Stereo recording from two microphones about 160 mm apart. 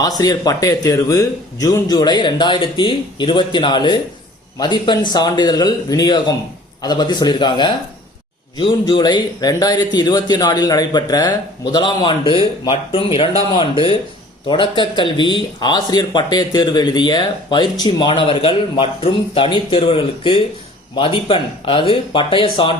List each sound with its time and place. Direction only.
0.2 s speech: 25° left (ahead or behind)